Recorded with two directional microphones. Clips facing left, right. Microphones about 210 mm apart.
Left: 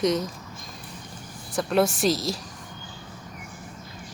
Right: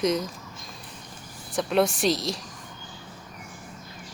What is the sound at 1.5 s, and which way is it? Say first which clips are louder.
Speech: left 1 dB; centre (ahead or behind).